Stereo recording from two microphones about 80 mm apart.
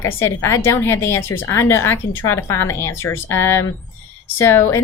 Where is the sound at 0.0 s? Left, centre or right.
Left.